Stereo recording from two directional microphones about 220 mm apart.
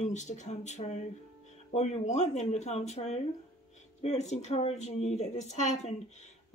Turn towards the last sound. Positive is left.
turn(degrees=30)  # may be behind; listen again after turning